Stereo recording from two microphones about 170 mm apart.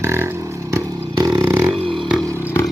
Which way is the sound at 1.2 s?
15° right (ahead or behind).